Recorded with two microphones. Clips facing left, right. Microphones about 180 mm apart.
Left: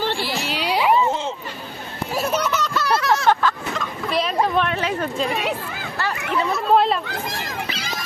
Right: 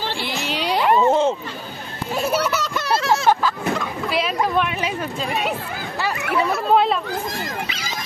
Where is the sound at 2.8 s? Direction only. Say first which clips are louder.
Even; 25° right (ahead or behind).